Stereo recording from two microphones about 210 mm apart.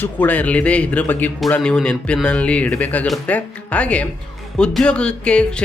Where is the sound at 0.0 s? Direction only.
10° left (ahead or behind).